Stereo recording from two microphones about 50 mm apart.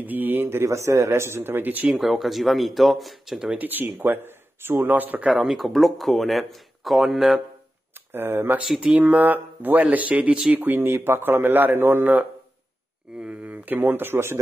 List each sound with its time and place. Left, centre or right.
0.0 s a man's voice: right
0.7 s speech: right
2.0 s speech: centre
3.5 s speech: right
5.4 s speech: centre
8.1 s a man's voice: right
10.5 s a man's voice: right
13.2 s speech: right